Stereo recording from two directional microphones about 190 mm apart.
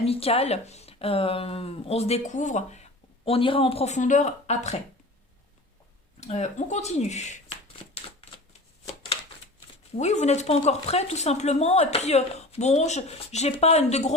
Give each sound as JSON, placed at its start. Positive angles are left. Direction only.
{"t": 0.0, "sound": "speech", "side_deg": 30}
{"t": 6.1, "sound": "speech", "side_deg": 35}
{"t": 10.0, "sound": "speech", "side_deg": 35}